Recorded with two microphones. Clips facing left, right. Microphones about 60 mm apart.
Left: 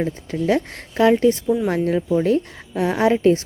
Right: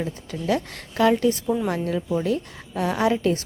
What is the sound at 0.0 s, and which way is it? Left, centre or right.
A woman's voice, left.